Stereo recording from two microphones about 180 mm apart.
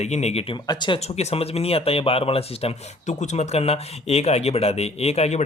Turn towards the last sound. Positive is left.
turn(degrees=35)  # may be behind; listen again after turning